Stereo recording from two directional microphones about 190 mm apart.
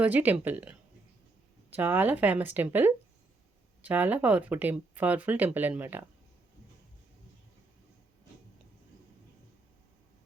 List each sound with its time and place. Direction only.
0.0 s speech: 10° right (ahead or behind)